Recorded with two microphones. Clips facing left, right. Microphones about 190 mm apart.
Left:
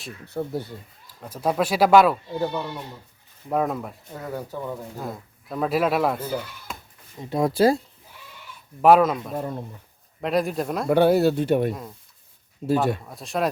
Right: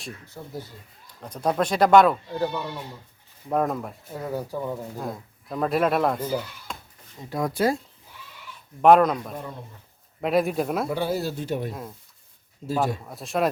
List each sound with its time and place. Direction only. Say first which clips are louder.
0.3 s speech: left 12 dB; 65° left (ahead or behind)
1.0 s speech: even; 5° left (ahead or behind)
3.5 s speech: even; centre (ahead or behind)
6.7 s a sound: left 1 dB; 5° left (ahead or behind)
7.2 s speech: left 5 dB; 25° left (ahead or behind)
8.8 s speech: even; 5° left (ahead or behind)
10.8 s speech: left 9 dB; 65° left (ahead or behind)
13.1 s speech: right 1 dB; centre (ahead or behind)